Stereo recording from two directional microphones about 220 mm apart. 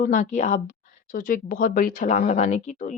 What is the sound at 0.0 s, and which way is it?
Speech, 35° left (ahead or behind).